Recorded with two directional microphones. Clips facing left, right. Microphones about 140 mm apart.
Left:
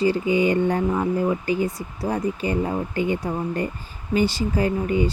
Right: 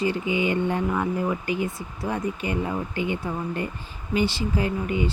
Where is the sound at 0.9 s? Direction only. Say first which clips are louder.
Left 3 dB; 30° left (ahead or behind).